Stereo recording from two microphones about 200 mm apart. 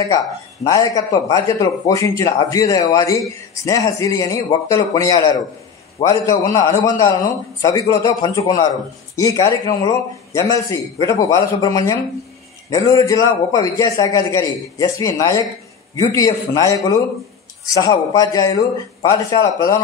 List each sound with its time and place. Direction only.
0.7 s a man's voice: 20° left (ahead or behind)
17.7 s a man's voice: 20° left (ahead or behind)